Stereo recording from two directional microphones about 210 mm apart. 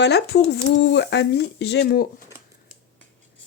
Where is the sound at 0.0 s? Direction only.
55° left (ahead or behind).